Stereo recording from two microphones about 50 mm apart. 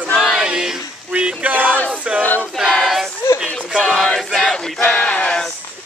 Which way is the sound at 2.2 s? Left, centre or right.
Left.